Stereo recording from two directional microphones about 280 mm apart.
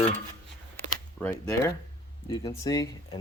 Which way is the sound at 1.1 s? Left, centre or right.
Centre.